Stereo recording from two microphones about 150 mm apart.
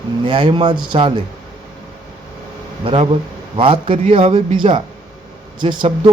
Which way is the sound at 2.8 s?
35° right (ahead or behind).